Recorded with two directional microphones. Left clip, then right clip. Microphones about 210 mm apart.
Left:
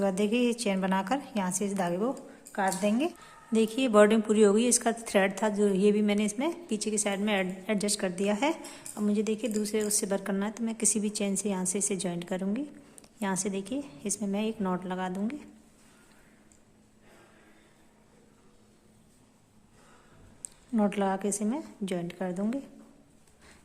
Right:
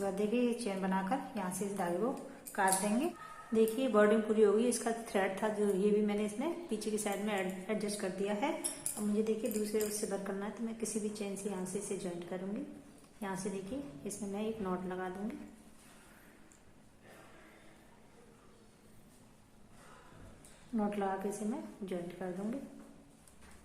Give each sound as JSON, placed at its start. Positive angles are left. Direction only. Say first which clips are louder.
{"t": 0.0, "sound": "a woman's voice", "louder": "left 6 dB", "side_deg": 45}
{"t": 20.7, "sound": "a woman's voice", "louder": "left 7 dB", "side_deg": 50}